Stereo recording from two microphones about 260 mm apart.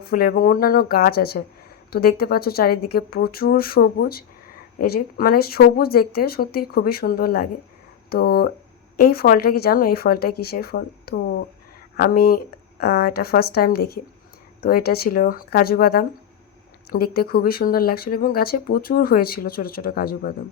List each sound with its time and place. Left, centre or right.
0.0 s speech: left